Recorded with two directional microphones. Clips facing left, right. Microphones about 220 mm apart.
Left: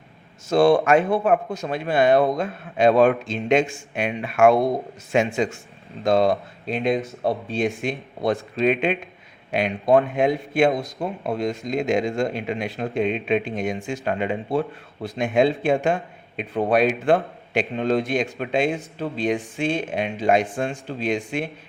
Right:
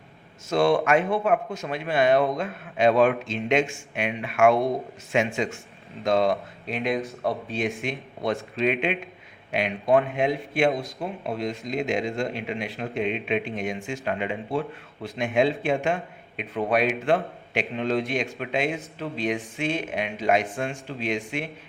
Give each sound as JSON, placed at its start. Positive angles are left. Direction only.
{"t": 0.5, "sound": "speech", "side_deg": 35}